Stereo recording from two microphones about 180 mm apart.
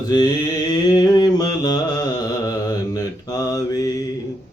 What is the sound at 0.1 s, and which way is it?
Mantra, 20° left (ahead or behind).